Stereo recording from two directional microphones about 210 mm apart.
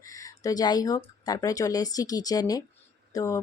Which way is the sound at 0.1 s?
15° left (ahead or behind).